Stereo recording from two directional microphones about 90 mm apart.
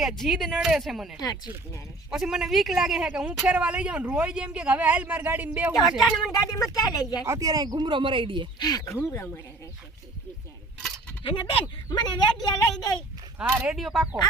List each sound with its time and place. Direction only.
0.0 s speech: centre (ahead or behind); by 5.7 s 20° right (ahead or behind)
5.7 s speech: 5° right (ahead or behind)
6.5 s speech: 40° left (ahead or behind)
7.3 s speech: 40° right (ahead or behind); by 8.4 s 70° right (ahead or behind)
8.5 s speech: 50° left (ahead or behind)
9.1 s speech: 25° left (ahead or behind)
11.2 s speech: 75° left (ahead or behind)
11.6 s speech: 50° left (ahead or behind)
13.4 s speech: 10° right (ahead or behind)